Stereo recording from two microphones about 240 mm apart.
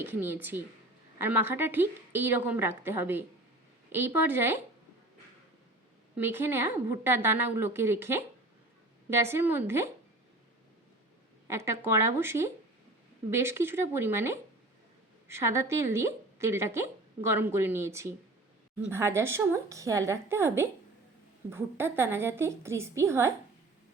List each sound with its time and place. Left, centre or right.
0.0 s a woman's voice: centre
6.1 s a woman's voice: centre
11.4 s a woman's voice: centre